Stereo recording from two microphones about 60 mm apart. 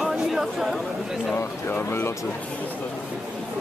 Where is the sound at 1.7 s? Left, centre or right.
Left.